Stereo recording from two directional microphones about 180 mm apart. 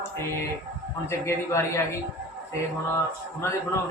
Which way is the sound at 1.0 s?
15° left (ahead or behind).